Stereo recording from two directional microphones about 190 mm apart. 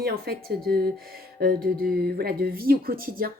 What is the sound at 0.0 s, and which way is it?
Speech, 55° right (ahead or behind).